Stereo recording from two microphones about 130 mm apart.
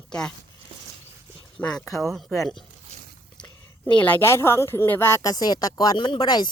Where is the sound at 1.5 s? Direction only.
10° left (ahead or behind).